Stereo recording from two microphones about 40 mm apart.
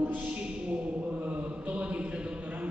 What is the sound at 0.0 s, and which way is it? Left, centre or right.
Mantra, right.